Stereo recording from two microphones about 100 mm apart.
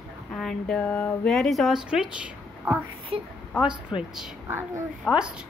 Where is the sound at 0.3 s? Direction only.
5° left (ahead or behind).